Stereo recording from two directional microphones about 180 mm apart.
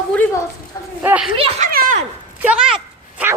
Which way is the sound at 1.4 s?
40° right (ahead or behind).